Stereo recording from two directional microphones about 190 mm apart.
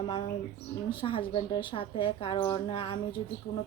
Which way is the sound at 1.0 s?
30° left (ahead or behind).